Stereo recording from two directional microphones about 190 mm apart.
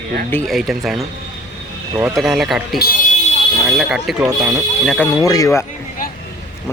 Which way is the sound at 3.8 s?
Centre (ahead or behind).